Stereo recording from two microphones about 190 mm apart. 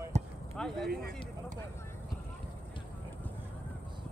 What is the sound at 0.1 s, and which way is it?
Basketball bounce, 35° right (ahead or behind).